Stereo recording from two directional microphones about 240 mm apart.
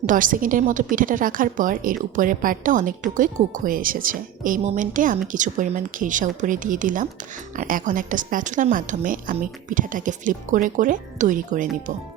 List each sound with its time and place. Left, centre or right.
0.0 s a woman's voice: right